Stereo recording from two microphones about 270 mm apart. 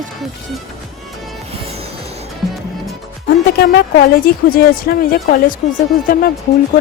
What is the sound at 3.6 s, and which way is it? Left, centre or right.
A woman's voice, left.